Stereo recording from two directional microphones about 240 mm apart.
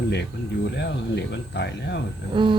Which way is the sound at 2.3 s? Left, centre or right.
Right.